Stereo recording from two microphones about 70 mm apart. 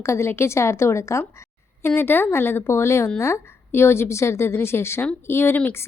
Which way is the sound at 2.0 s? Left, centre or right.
Left.